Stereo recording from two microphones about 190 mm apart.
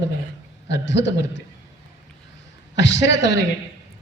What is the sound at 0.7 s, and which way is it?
Speech, 70° left (ahead or behind).